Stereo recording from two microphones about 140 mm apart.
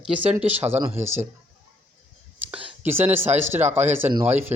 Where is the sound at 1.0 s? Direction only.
20° right (ahead or behind).